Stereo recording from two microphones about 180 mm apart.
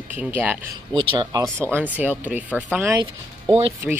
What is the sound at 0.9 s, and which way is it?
Speech, 25° right (ahead or behind).